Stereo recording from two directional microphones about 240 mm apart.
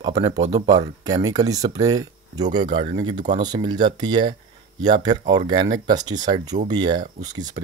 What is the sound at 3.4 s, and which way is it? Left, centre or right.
Speech, centre.